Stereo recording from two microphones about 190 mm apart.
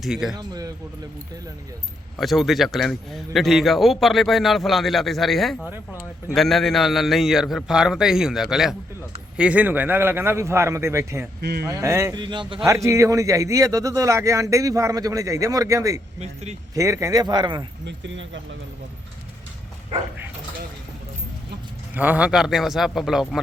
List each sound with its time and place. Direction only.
0.0 s a man's voice: centre (ahead or behind)
0.3 s speech: 20° right (ahead or behind)
2.1 s a man's voice: centre (ahead or behind)
11.3 s speech: 55° right (ahead or behind)
11.6 s speech: 15° right (ahead or behind)
12.6 s a man's voice: 15° right (ahead or behind)
16.2 s speech: 35° right (ahead or behind)
16.7 s speech: 15° right (ahead or behind)
17.8 s speech: 75° right (ahead or behind)
21.9 s a man's voice: 10° right (ahead or behind)